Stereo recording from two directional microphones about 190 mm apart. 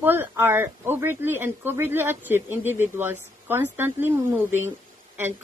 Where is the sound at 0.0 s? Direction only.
10° right (ahead or behind).